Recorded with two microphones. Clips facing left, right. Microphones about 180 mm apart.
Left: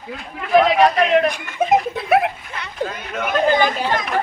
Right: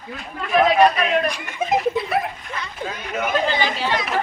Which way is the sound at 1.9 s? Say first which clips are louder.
Left 5 dB; 70° left (ahead or behind).